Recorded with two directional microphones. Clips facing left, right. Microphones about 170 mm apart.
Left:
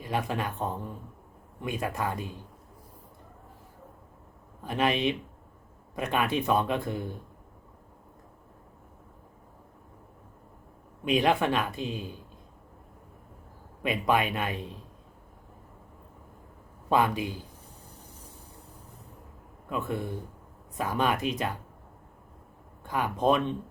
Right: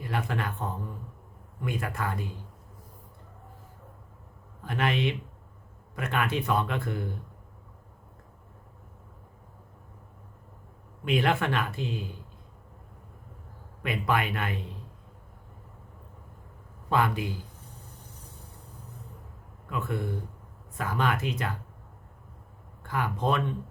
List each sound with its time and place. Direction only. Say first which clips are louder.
0.0 s speech: left 1 dB; 20° left (ahead or behind)
4.6 s speech: left 2 dB; 20° left (ahead or behind)
11.0 s speech: left 2 dB; 15° left (ahead or behind)
13.8 s speech: left 2 dB; 20° left (ahead or behind)
16.9 s speech: left 2 dB; 20° left (ahead or behind)
19.7 s speech: even; 15° left (ahead or behind)
22.8 s speech: left 2 dB; 15° left (ahead or behind)